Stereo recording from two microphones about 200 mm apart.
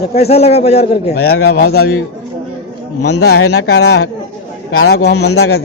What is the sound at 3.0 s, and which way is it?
A man's voice, 55° left (ahead or behind).